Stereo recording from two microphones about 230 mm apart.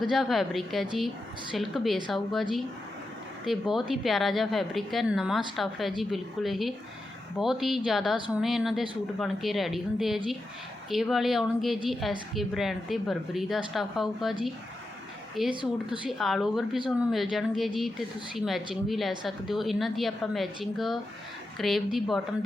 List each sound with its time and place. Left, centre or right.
0.0 s a woman's voice: centre
15.4 s a woman's voice: centre